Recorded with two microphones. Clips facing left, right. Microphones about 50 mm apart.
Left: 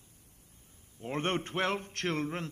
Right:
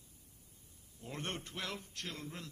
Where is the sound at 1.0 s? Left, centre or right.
Left.